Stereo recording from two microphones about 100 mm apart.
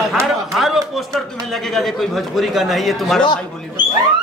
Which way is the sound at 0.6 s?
Centre (ahead or behind).